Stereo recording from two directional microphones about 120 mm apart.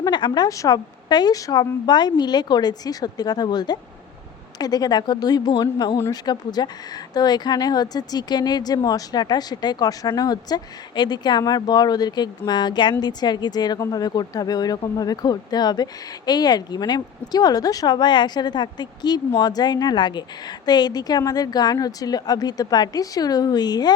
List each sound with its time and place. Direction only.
0.0 s a woman's voice: 35° left (ahead or behind)